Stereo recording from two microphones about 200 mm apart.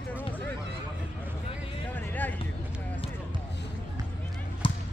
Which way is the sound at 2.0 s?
10° left (ahead or behind).